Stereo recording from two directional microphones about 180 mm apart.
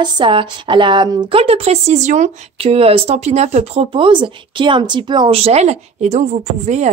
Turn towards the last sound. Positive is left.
turn(degrees=-40)  # may be behind; listen again after turning